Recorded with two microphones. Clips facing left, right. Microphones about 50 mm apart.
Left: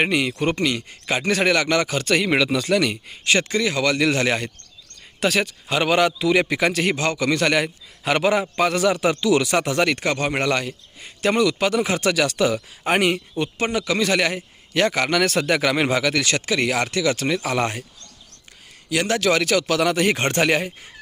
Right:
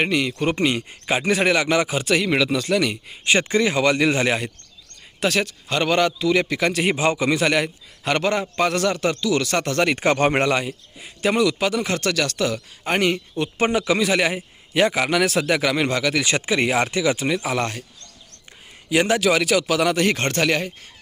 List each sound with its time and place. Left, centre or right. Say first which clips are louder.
0.0 s speech: left 1 dB; centre
0.5 s speech: right 2 dB; right
2.1 s speech: left 1 dB; centre
3.2 s speech: right 1 dB; right
4.3 s speech: even; centre
6.8 s speech: right 1 dB; centre
7.4 s speech: even; centre
9.9 s speech: right 4 dB; right
10.4 s speech: right 1 dB; centre
13.6 s speech: right 4 dB; right
14.0 s speech: even; centre
16.2 s speech: right 1 dB; right
17.6 s speech: left 2 dB; centre
18.9 s speech: right 2 dB; centre